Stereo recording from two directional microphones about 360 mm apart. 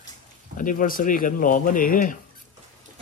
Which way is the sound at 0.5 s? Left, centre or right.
Left.